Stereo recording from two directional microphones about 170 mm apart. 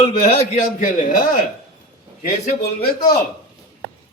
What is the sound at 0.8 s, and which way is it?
Speech, 50° left (ahead or behind).